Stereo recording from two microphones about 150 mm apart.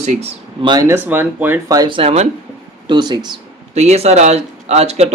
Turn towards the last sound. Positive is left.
turn(degrees=-45)  # may be behind; listen again after turning